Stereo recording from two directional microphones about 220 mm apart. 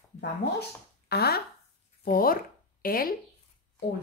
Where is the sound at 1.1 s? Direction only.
45° left (ahead or behind).